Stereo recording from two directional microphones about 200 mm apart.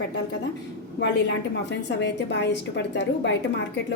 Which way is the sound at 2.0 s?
60° left (ahead or behind).